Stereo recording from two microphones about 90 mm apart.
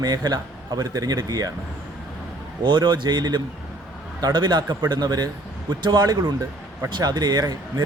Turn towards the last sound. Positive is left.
turn(degrees=-45)  # may be behind; listen again after turning